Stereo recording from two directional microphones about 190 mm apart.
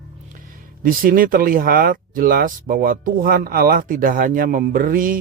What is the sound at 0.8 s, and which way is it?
Speech, 45° right (ahead or behind).